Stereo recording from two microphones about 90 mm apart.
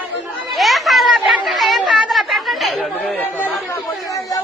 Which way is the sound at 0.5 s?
Centre (ahead or behind).